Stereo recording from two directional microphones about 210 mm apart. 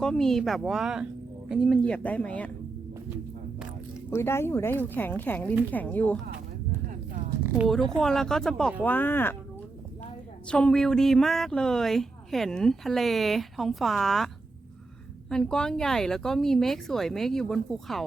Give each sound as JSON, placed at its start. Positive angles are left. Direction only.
{"t": 0.0, "sound": "a woman's voice", "side_deg": 5}
{"t": 4.1, "sound": "a woman's voice", "side_deg": 10}
{"t": 7.4, "sound": "a woman's voice", "side_deg": -5}
{"t": 10.5, "sound": "a woman's voice", "side_deg": 5}
{"t": 15.3, "sound": "a woman's voice", "side_deg": 5}